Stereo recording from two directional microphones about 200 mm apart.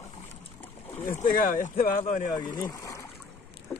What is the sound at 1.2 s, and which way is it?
Speech, 45° left (ahead or behind).